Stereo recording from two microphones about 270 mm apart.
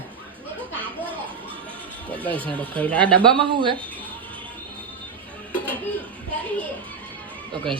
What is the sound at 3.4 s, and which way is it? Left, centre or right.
Speech, centre.